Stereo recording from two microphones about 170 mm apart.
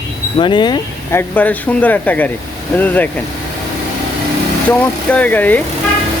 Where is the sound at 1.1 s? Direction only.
10° left (ahead or behind).